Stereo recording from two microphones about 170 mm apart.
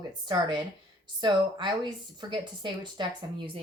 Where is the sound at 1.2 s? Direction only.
25° right (ahead or behind).